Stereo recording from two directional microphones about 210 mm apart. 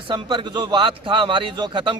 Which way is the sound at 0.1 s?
20° right (ahead or behind).